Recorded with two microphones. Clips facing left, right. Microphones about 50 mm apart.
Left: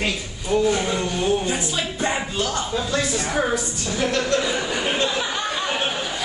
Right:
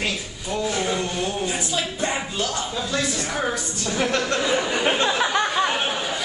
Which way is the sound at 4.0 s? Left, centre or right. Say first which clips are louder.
Left 1 dB; right.